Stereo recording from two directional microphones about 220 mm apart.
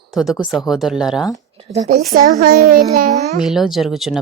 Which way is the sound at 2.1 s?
40° right (ahead or behind).